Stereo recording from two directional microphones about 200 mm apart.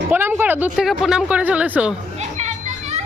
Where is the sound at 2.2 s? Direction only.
35° right (ahead or behind).